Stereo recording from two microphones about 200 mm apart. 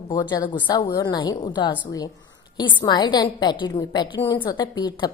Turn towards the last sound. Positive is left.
turn(degrees=20)  # may be behind; listen again after turning